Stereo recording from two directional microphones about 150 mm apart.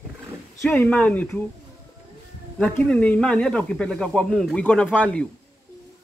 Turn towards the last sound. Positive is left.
turn(degrees=10)  # may be behind; listen again after turning